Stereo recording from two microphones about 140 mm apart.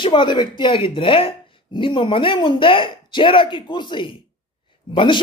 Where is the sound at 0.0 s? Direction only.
35° left (ahead or behind).